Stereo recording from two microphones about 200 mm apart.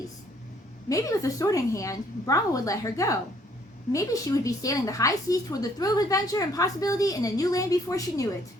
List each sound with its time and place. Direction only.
0.9 s a woman's voice: 15° left (ahead or behind)